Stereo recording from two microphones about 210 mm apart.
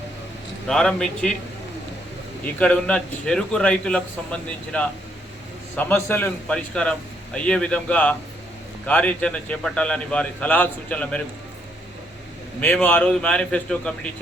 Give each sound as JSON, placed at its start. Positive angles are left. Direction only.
{"t": 0.7, "sound": "a man's voice", "side_deg": 0}
{"t": 2.6, "sound": "a man's voice", "side_deg": 5}
{"t": 12.5, "sound": "a man's voice", "side_deg": 10}